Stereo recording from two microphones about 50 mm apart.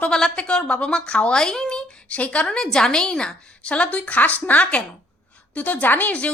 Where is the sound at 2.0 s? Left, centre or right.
Left.